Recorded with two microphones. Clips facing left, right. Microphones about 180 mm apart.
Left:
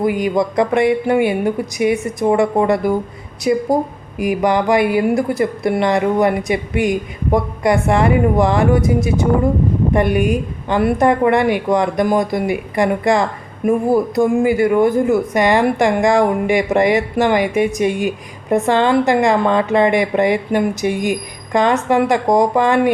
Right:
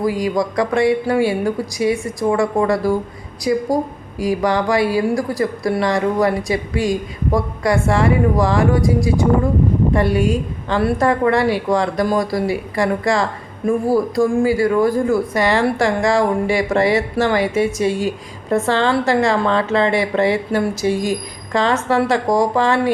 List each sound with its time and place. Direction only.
0.0 s speech: 20° left (ahead or behind)